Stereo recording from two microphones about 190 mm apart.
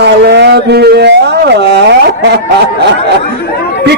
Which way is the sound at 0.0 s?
65° right (ahead or behind).